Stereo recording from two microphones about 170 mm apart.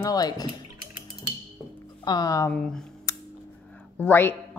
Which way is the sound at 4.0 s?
10° left (ahead or behind).